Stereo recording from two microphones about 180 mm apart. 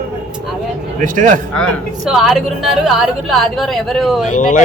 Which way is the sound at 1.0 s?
45° right (ahead or behind).